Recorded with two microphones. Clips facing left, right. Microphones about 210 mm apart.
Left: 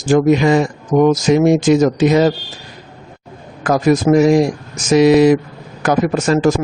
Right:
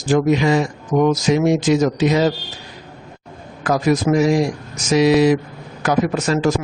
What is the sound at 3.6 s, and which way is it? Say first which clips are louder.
Speech: left 4 dB; 50° left (ahead or behind).